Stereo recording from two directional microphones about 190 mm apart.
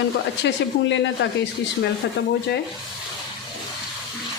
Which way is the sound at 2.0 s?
70° left (ahead or behind).